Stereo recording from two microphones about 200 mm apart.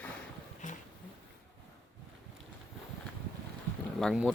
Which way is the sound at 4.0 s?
Centre (ahead or behind).